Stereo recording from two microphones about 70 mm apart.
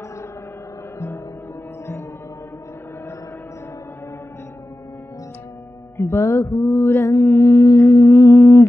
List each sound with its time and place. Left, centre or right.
0.9 s music: left
5.9 s mantra: left